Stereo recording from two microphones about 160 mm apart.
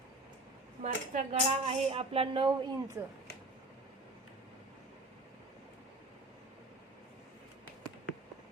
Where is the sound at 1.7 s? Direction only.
40° right (ahead or behind).